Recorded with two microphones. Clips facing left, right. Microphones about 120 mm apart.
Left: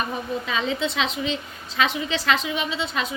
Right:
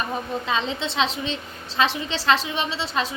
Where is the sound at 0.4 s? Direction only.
30° right (ahead or behind).